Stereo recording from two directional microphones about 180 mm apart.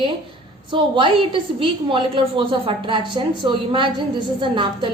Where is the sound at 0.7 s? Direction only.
30° right (ahead or behind).